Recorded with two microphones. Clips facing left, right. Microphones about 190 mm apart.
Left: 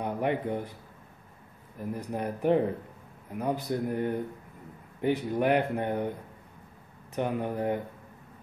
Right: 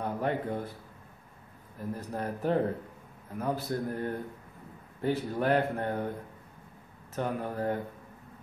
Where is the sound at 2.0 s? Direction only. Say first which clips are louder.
Left 3 dB; 15° left (ahead or behind).